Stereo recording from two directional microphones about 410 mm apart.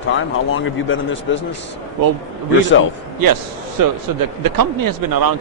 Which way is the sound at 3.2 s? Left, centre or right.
Right.